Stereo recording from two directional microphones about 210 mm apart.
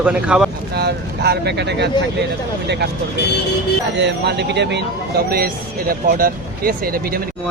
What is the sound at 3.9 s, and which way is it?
Speech, 55° right (ahead or behind).